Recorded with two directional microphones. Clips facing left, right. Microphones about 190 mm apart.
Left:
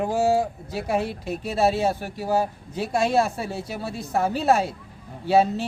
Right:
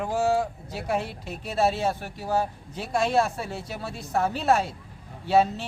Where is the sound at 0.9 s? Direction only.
5° left (ahead or behind).